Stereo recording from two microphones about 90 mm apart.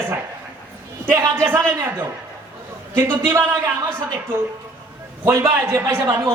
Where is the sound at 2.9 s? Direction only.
30° right (ahead or behind).